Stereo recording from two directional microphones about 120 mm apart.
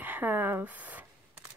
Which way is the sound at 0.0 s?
15° right (ahead or behind).